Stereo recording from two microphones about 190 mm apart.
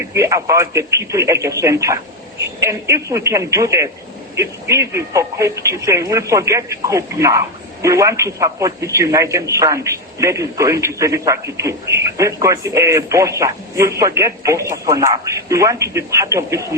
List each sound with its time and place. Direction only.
0.1 s speech: 15° right (ahead or behind)